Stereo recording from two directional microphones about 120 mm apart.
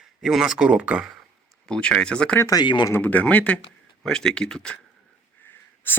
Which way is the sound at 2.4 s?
30° left (ahead or behind).